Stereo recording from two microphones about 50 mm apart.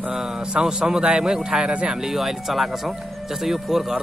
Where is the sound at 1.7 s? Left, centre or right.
Right.